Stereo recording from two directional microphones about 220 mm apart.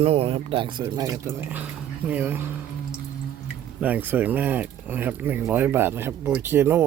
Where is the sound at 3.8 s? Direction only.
10° right (ahead or behind).